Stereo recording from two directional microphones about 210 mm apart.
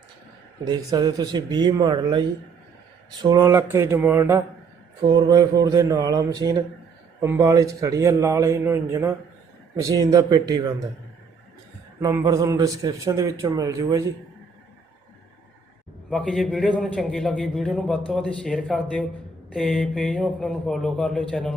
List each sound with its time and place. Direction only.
0.6 s a man's voice: 20° right (ahead or behind)
11.9 s a man's voice: 10° right (ahead or behind)
16.0 s a man's voice: 5° left (ahead or behind)